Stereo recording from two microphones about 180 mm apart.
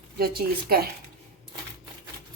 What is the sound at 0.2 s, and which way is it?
Speech, 55° right (ahead or behind).